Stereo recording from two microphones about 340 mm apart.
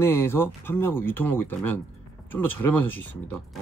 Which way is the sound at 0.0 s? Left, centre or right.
Centre.